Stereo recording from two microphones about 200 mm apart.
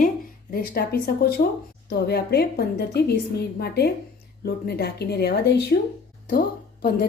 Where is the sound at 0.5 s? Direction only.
50° left (ahead or behind).